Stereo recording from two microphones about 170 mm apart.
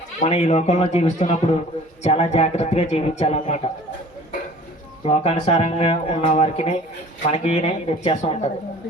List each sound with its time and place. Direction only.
0.2 s speech: 40° left (ahead or behind)
5.0 s speech: 40° left (ahead or behind)